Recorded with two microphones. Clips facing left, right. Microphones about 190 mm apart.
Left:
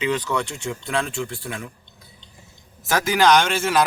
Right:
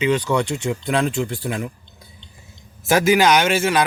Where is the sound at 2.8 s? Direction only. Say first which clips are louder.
Right 3 dB; 10° right (ahead or behind).